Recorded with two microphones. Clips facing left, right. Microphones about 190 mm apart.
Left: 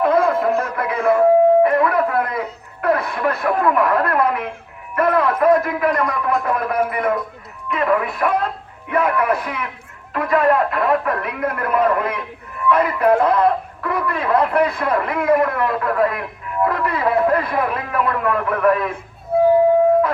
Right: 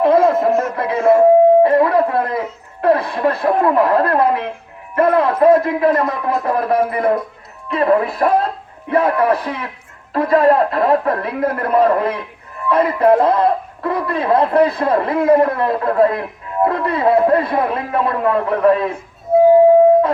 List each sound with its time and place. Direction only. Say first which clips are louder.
0.0 s a sound: right 4 dB; 25° right (ahead or behind)
1.6 s radio: right 3 dB; 30° right (ahead or behind)
2.8 s a man's voice: right 4 dB; 30° right (ahead or behind)